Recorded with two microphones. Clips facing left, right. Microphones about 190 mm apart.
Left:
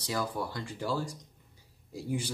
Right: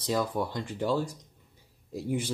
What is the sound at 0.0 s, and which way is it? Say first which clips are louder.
Speech: right 5 dB; 20° right (ahead or behind).